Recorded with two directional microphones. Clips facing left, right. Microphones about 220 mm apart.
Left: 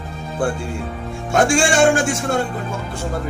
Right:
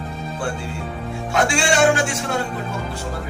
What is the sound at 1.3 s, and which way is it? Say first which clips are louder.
Speech: left 4 dB; 50° left (ahead or behind).